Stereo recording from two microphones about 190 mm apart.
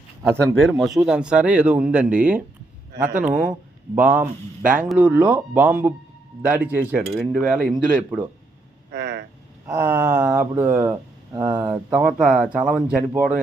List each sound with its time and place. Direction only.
0.6 s speech: centre (ahead or behind)
3.1 s speech: 45° right (ahead or behind)
3.9 s speech: 10° right (ahead or behind)
8.9 s vehicle: 60° right (ahead or behind)
9.6 s speech: 10° right (ahead or behind)
11.6 s speech: 5° right (ahead or behind)